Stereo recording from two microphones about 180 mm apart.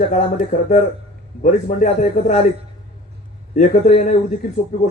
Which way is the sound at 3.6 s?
40° left (ahead or behind).